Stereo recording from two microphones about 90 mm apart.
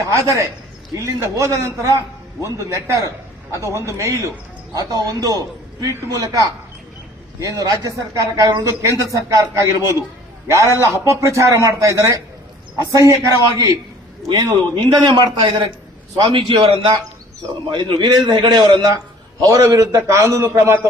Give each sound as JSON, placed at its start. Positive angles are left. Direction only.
{"t": 0.0, "sound": "a man's voice", "side_deg": -35}
{"t": 4.7, "sound": "a man's voice", "side_deg": -45}
{"t": 14.3, "sound": "a man's voice", "side_deg": -60}
{"t": 16.2, "sound": "a man's voice", "side_deg": -75}
{"t": 17.7, "sound": "a man's voice", "side_deg": -60}